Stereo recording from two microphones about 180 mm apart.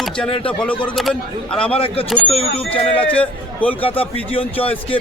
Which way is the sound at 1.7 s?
30° left (ahead or behind).